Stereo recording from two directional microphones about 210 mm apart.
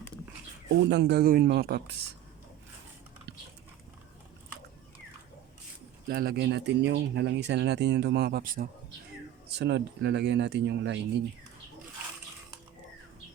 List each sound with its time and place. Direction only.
0.9 s speech: 55° right (ahead or behind)
6.1 s speech: 45° right (ahead or behind)
9.5 s speech: 55° right (ahead or behind)